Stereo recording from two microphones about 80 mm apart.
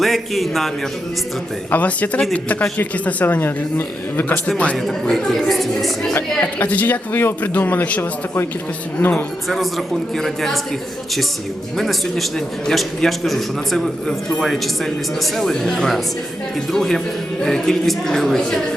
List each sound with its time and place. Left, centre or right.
0.0 s a man's voice: centre
1.7 s a man's voice: centre
4.4 s a woman's voice: centre
4.9 s a man's voice: centre
6.1 s a man's voice: left
9.5 s a man's voice: centre
11.8 s a man's voice: centre